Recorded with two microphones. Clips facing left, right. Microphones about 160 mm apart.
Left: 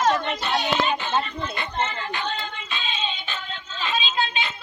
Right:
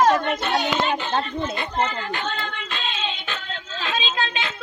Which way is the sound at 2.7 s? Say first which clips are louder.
Even; 90° right.